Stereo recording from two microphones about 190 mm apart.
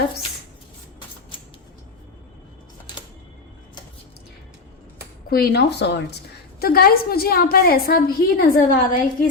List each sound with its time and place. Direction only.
5.3 s speech: 55° left (ahead or behind)
6.6 s a woman's voice: 50° left (ahead or behind)